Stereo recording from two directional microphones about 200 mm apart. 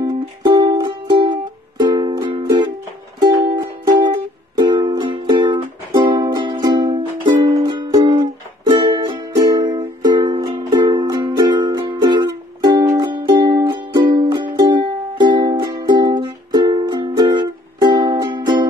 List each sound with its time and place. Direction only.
0.0 s music: 20° right (ahead or behind)